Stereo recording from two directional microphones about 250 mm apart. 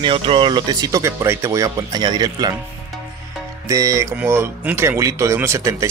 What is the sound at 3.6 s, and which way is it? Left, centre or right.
Speech, centre.